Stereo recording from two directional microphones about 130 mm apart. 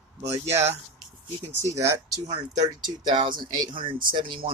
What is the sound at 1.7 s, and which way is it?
Speech, 25° right (ahead or behind).